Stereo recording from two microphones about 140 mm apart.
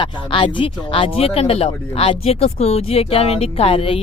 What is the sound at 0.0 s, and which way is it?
Speech, 35° left (ahead or behind).